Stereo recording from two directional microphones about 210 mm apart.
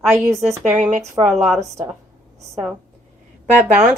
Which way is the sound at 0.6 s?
Centre (ahead or behind).